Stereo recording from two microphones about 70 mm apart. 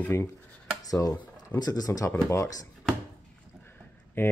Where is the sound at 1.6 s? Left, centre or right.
Left.